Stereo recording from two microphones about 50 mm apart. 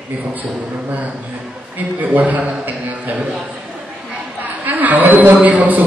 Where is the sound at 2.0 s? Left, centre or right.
Right.